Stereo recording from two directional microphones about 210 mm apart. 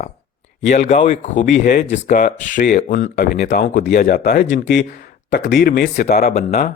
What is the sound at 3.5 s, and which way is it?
Speech, 50° left (ahead or behind).